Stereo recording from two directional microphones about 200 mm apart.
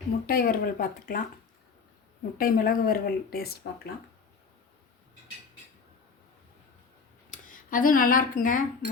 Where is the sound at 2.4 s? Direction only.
45° left (ahead or behind).